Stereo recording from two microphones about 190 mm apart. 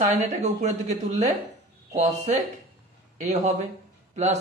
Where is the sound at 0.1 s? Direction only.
35° right (ahead or behind).